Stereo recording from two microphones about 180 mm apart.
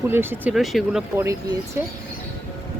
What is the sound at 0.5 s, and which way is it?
Speech, centre (ahead or behind).